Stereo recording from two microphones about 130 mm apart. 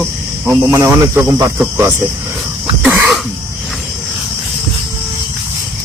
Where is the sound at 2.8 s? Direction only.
15° right (ahead or behind).